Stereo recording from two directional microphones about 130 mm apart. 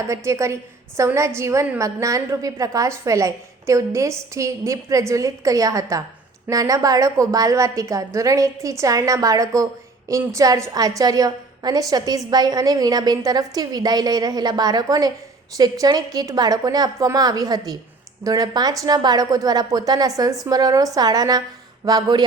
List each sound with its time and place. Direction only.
0.3 s a woman's voice: 25° right (ahead or behind)